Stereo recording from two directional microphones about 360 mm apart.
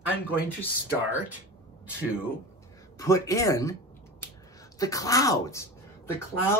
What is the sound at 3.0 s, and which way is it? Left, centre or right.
Speech, centre.